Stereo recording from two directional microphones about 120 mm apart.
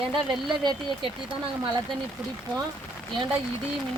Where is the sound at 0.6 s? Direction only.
45° right (ahead or behind).